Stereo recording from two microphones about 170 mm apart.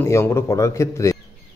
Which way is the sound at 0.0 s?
15° left (ahead or behind).